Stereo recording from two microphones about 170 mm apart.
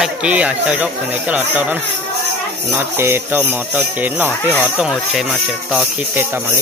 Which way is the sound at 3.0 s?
15° right (ahead or behind).